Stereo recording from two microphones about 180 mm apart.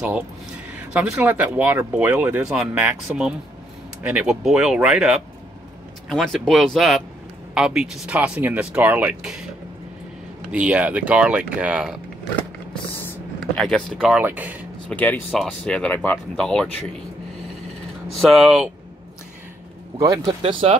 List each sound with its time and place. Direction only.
0.7 s speech: 10° right (ahead or behind)
10.5 s speech: 5° right (ahead or behind)
13.6 s speech: 5° left (ahead or behind)
14.9 s speech: 10° left (ahead or behind)
18.1 s speech: centre (ahead or behind)
20.2 s speech: 30° right (ahead or behind)